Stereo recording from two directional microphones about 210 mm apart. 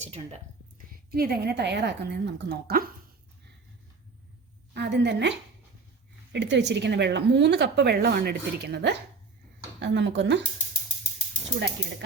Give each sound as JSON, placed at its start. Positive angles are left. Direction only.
{"t": 0.0, "sound": "speech", "side_deg": -30}
{"t": 1.1, "sound": "a woman's voice", "side_deg": -45}
{"t": 4.7, "sound": "a woman's voice", "side_deg": -55}